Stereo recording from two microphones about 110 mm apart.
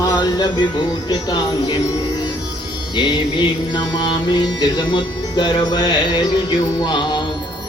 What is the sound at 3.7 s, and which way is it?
Music, 40° left (ahead or behind).